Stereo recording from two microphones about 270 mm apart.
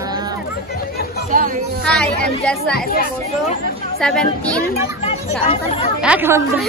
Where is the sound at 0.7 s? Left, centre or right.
Left.